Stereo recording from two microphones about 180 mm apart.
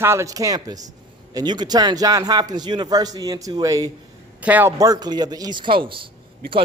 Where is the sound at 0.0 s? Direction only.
15° right (ahead or behind).